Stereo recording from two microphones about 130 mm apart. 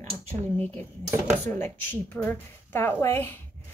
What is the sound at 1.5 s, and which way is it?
A woman's voice, 15° left (ahead or behind).